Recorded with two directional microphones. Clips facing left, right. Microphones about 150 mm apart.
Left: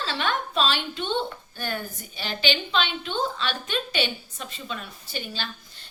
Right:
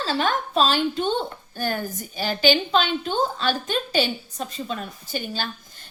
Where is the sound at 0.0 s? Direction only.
40° right (ahead or behind).